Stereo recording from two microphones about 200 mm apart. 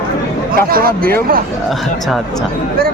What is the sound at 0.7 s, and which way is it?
Speech, 45° right (ahead or behind).